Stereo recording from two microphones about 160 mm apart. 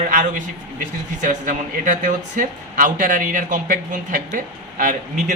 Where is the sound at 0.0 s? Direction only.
55° right (ahead or behind).